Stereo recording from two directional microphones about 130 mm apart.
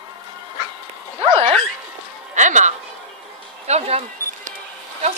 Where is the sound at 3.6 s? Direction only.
55° right (ahead or behind).